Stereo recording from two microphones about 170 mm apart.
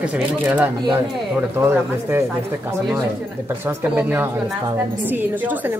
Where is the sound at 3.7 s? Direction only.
10° right (ahead or behind).